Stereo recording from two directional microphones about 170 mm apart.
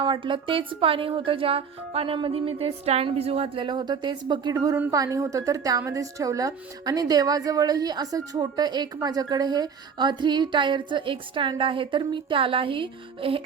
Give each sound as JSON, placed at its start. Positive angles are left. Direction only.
{"t": 0.0, "sound": "speech", "side_deg": -30}